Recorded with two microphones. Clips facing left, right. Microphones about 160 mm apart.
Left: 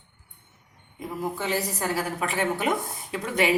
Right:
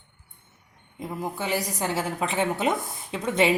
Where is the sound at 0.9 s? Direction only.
15° right (ahead or behind).